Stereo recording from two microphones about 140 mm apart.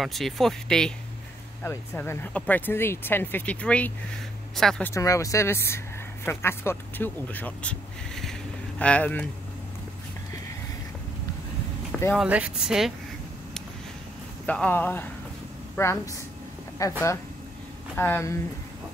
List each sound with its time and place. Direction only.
0.0 s speech: centre (ahead or behind)
1.6 s speech: 15° left (ahead or behind)
4.8 s speech: 20° left (ahead or behind)
12.2 s speech: 10° right (ahead or behind)
14.4 s speech: 10° left (ahead or behind)